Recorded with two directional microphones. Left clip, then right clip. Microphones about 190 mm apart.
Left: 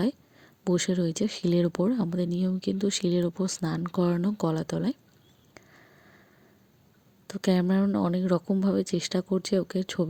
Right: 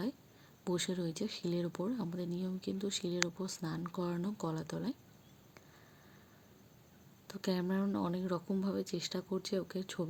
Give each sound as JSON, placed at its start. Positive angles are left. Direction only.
{"t": 0.6, "sound": "speech", "side_deg": 35}
{"t": 7.3, "sound": "speech", "side_deg": 40}